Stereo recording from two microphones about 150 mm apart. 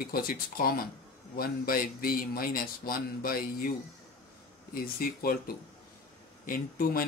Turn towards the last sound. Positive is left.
turn(degrees=75)  # may be behind; listen again after turning